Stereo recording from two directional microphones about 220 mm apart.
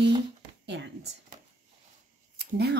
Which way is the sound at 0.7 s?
50° right (ahead or behind).